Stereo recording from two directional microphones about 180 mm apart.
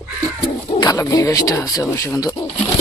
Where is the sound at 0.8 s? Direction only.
20° left (ahead or behind).